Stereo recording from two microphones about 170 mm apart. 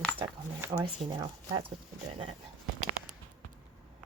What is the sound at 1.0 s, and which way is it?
Speech, 30° right (ahead or behind).